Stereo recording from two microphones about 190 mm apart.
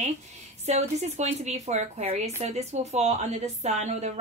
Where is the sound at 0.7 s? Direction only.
35° right (ahead or behind).